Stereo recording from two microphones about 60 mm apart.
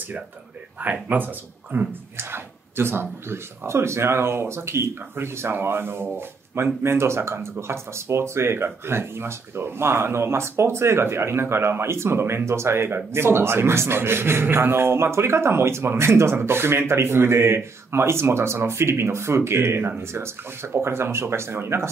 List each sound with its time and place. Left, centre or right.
1.0 s speech: right
2.3 s speech: right